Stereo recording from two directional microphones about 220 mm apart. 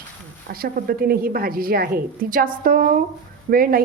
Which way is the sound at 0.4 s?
45° right (ahead or behind).